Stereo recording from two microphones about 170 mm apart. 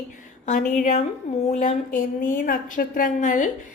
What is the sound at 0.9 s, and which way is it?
A woman's voice, 45° left (ahead or behind).